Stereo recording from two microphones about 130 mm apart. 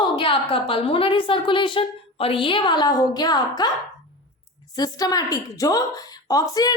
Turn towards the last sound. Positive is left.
turn(degrees=30)  # may be behind; listen again after turning